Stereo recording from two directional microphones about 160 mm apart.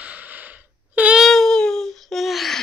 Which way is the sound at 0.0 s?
10° right (ahead or behind).